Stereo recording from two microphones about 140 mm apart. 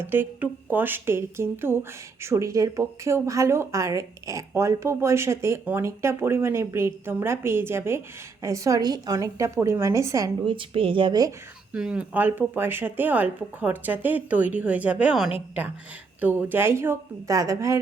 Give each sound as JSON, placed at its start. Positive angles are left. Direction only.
{"t": 0.0, "sound": "speech", "side_deg": -15}
{"t": 10.4, "sound": "speech", "side_deg": -35}
{"t": 11.7, "sound": "speech", "side_deg": -5}